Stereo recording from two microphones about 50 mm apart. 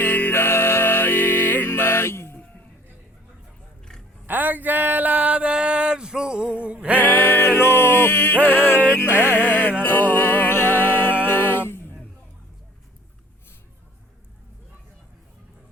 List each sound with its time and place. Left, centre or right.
0.0 s music: left
4.3 s a sound: right
7.0 s music: left
8.4 s music: left